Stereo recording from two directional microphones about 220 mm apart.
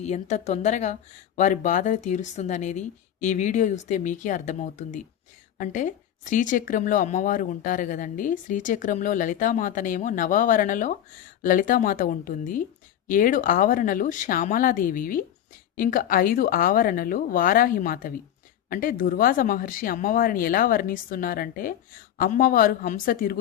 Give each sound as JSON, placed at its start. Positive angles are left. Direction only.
{"t": 0.0, "sound": "a woman's voice", "side_deg": 30}